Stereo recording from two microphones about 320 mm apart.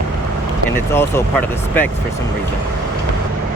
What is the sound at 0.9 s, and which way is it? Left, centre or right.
Speech, centre.